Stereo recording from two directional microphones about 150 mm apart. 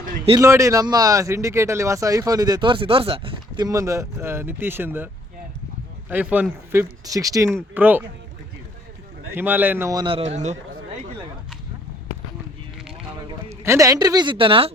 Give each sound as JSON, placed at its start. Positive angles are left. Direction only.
{"t": 0.3, "sound": "speech", "side_deg": -20}
{"t": 6.1, "sound": "speech", "side_deg": -10}
{"t": 9.3, "sound": "speech", "side_deg": -15}
{"t": 9.9, "sound": "speech", "side_deg": -30}
{"t": 13.5, "sound": "speech", "side_deg": -20}